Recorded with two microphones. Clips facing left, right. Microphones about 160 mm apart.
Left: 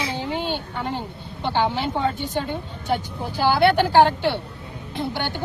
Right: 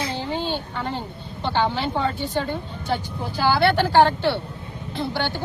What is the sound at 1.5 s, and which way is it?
Speech, 15° left (ahead or behind).